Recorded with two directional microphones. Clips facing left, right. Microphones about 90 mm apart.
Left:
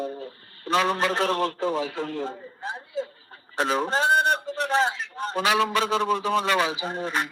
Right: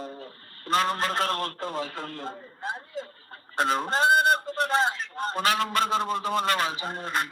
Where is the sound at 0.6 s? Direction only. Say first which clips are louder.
Left 2 dB; 45° right (ahead or behind).